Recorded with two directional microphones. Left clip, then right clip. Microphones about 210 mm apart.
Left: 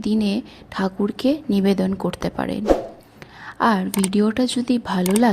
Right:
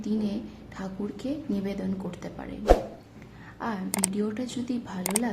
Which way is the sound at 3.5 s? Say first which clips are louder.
Left 15 dB; 40° left (ahead or behind).